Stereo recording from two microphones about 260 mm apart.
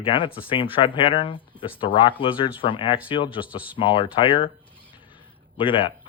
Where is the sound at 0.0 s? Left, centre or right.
Centre.